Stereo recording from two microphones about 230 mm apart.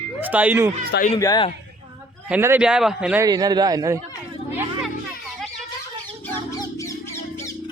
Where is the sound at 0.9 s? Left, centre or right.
Left.